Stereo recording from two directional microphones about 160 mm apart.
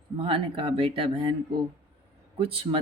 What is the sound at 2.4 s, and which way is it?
Speech, 35° right (ahead or behind).